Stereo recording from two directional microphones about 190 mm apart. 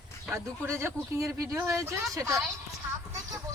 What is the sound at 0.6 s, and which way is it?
Speech, 15° right (ahead or behind).